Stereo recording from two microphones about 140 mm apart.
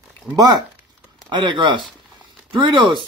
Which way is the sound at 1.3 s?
35° right (ahead or behind).